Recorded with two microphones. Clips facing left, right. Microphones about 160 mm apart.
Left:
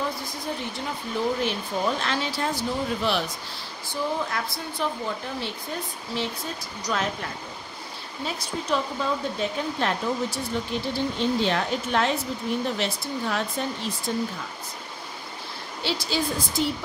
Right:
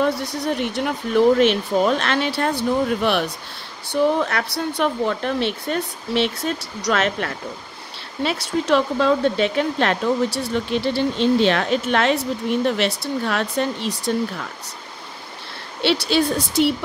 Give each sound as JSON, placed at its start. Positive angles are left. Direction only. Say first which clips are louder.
{"t": 0.0, "sound": "speech", "louder": "right 9 dB", "side_deg": -75}
{"t": 15.8, "sound": "speech", "louder": "right 9 dB", "side_deg": -70}